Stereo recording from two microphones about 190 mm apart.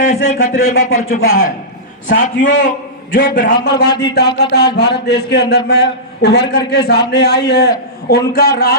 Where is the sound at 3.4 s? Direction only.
65° left (ahead or behind).